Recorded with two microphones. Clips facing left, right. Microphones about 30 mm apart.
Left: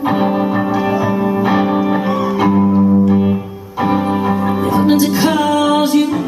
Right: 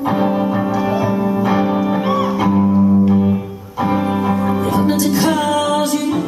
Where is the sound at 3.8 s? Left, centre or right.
Centre.